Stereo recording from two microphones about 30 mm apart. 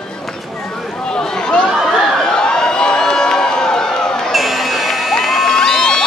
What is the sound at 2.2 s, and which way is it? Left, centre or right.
Crowd, left.